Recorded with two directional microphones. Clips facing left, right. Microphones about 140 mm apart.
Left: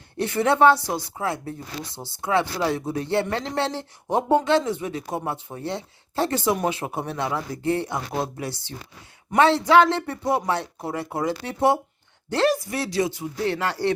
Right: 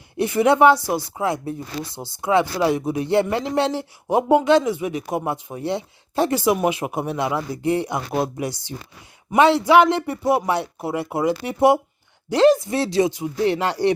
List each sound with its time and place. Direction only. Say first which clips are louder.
0.2 s speech: right 3 dB; 15° right (ahead or behind)